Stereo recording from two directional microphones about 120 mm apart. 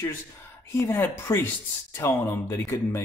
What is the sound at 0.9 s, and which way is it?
Speech, 20° left (ahead or behind).